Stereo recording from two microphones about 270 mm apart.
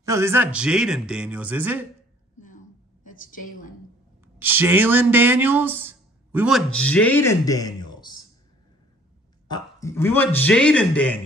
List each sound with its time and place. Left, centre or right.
0.0 s a man's voice: centre
2.4 s a sound: left
4.4 s speech: centre
9.5 s a man's voice: centre